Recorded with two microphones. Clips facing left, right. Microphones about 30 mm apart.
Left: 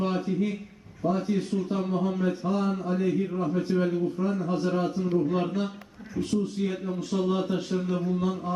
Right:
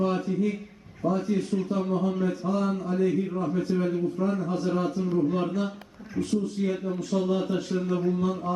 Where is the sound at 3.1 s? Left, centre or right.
Centre.